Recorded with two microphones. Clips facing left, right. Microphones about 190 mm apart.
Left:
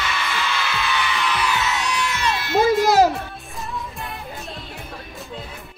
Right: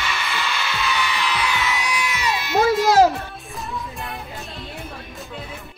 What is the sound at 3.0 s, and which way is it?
Music, centre (ahead or behind).